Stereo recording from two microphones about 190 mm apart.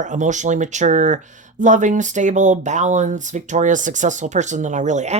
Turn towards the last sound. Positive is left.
turn(degrees=-40)  # may be behind; listen again after turning